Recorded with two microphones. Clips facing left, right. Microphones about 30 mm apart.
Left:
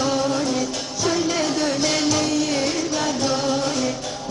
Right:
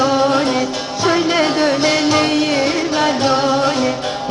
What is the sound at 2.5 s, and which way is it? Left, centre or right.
Music, right.